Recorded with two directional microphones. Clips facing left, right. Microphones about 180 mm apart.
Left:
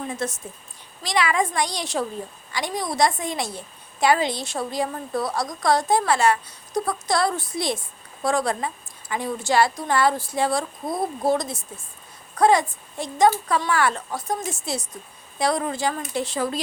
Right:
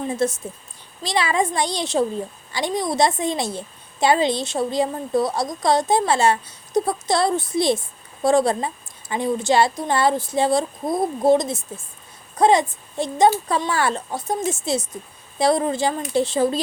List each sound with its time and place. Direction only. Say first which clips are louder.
0.1 s a woman's voice: right 7 dB; 30° right (ahead or behind)